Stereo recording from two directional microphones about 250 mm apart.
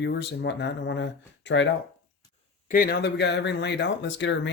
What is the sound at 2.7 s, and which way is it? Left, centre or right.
Speech, left.